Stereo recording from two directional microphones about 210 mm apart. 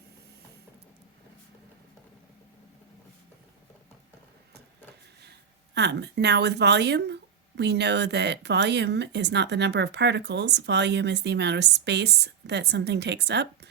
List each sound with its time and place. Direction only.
5.7 s speech: 55° right (ahead or behind)